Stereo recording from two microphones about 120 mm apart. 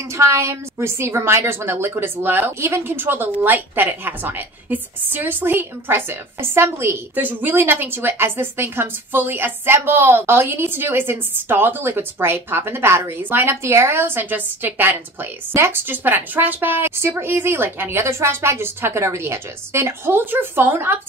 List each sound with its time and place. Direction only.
0.2 s a woman's voice: 25° right (ahead or behind)